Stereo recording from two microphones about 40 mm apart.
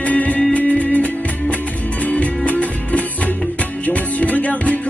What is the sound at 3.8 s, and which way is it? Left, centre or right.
Music, left.